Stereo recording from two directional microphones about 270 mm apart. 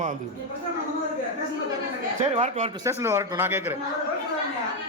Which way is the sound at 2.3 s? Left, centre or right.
Right.